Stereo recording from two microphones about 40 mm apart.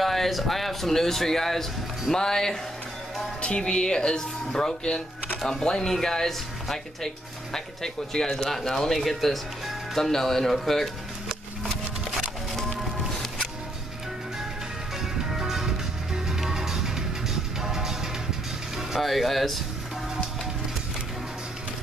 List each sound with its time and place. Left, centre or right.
0.0 s speech: centre
15.2 s music: centre
18.9 s speech: centre